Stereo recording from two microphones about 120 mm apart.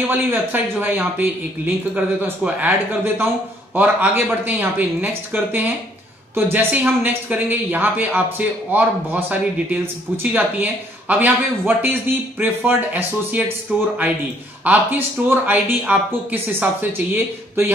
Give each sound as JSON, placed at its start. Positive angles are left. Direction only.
{"t": 0.1, "sound": "speech", "side_deg": -15}
{"t": 3.7, "sound": "speech", "side_deg": -15}